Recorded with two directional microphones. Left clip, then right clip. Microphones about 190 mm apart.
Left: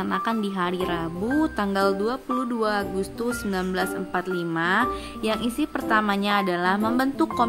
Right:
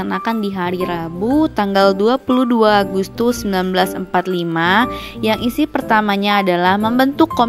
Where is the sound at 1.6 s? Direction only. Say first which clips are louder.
Right 10 dB; 35° right (ahead or behind).